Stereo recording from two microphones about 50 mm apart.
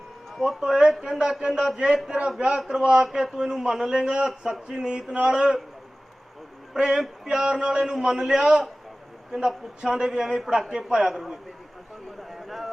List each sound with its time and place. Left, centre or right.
0.4 s a man's voice: centre
6.7 s a man's voice: centre
12.3 s a sound: centre